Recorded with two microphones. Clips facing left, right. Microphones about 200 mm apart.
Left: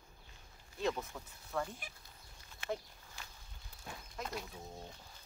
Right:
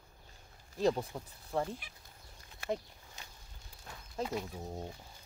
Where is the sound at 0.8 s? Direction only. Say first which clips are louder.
Right 6 dB; 35° right (ahead or behind).